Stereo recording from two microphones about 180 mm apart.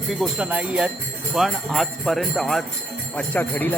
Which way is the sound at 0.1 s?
5° right (ahead or behind).